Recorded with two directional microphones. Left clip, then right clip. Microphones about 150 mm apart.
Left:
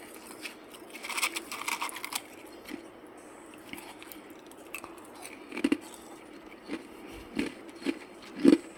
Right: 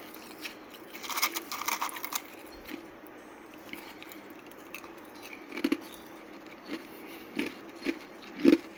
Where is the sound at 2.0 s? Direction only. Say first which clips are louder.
Even; 5° left (ahead or behind).